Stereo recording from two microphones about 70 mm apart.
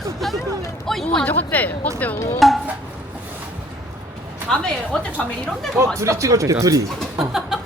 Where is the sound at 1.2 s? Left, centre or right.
Left.